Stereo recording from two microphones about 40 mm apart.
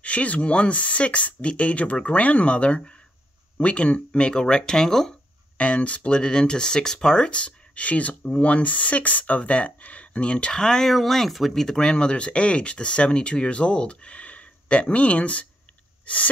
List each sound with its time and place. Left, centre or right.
0.0 s speech: left; by 5.1 s centre
5.6 s speech: left
10.6 s speech: centre
11.5 s speech: centre; by 15.4 s left